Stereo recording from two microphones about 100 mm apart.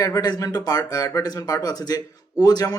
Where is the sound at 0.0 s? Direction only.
40° left (ahead or behind).